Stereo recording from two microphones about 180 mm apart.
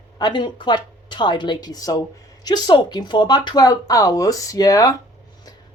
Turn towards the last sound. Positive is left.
turn(degrees=20)  # may be behind; listen again after turning